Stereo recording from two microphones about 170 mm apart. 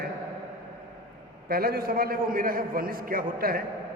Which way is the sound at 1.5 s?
60° right (ahead or behind).